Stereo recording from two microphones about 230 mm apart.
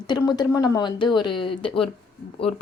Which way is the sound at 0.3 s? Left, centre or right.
Centre.